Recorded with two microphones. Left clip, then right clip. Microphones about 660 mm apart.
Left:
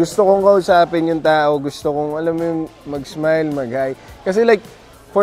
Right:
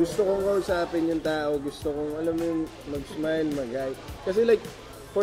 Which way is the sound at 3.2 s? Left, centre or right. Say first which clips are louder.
Left 11 dB; left.